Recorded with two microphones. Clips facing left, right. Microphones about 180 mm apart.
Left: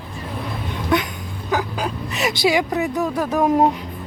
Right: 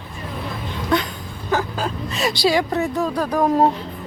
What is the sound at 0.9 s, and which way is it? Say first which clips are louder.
A woman's voice: even; 20° left (ahead or behind).